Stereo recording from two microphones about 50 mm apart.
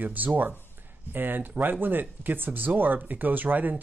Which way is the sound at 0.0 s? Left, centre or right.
Right.